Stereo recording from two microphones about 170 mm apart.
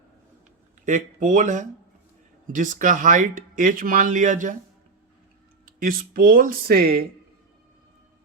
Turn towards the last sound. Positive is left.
turn(degrees=-65)  # may be behind; listen again after turning